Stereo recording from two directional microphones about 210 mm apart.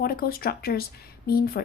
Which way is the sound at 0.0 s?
45° left (ahead or behind).